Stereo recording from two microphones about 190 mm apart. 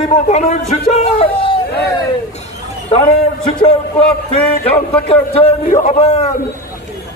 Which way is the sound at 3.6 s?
30° left (ahead or behind).